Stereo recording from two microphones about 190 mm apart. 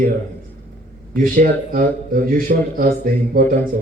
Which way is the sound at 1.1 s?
45° right (ahead or behind).